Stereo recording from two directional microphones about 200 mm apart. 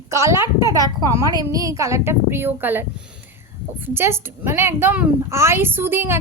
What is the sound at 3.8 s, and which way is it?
A woman's voice, 10° right (ahead or behind).